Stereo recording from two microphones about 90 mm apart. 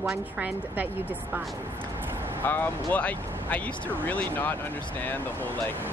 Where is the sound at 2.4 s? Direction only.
20° left (ahead or behind).